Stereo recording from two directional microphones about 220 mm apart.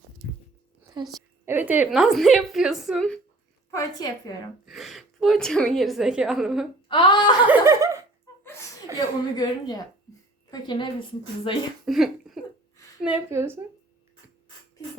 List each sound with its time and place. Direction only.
0.9 s a woman's voice: 20° right (ahead or behind)
1.5 s a woman's voice: 10° right (ahead or behind)
3.7 s a woman's voice: 15° left (ahead or behind)
4.6 s a woman's voice: centre (ahead or behind)
6.8 s speech: 20° left (ahead or behind)
7.4 s snicker: 10° right (ahead or behind)
9.0 s a woman's voice: 20° left (ahead or behind)
11.9 s a sound: centre (ahead or behind)
13.0 s a woman's voice: 5° right (ahead or behind)